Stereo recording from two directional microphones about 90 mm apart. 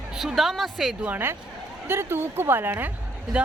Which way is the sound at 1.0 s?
20° right (ahead or behind).